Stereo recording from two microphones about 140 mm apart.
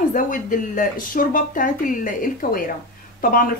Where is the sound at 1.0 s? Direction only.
85° left.